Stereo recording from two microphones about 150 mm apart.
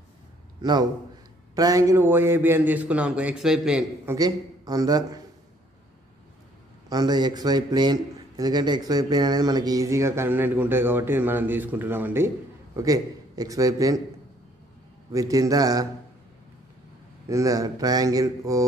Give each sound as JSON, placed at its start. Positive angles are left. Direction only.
{"t": 0.6, "sound": "a man's voice", "side_deg": -25}
{"t": 4.0, "sound": "a man's voice", "side_deg": -20}
{"t": 6.9, "sound": "a man's voice", "side_deg": -25}
{"t": 15.1, "sound": "a man's voice", "side_deg": -20}
{"t": 17.3, "sound": "a man's voice", "side_deg": -20}